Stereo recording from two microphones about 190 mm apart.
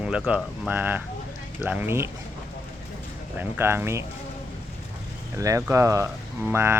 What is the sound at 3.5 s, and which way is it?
Speech, 10° right (ahead or behind).